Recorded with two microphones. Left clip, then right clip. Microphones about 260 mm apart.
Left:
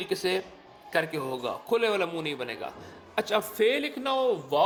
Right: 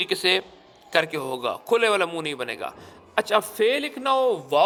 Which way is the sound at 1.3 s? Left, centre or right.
Right.